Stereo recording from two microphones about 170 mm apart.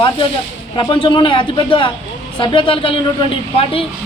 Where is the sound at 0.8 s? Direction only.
30° left (ahead or behind).